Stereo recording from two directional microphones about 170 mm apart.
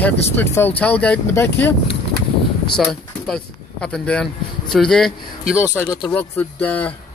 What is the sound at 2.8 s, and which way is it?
Speech, 5° left (ahead or behind).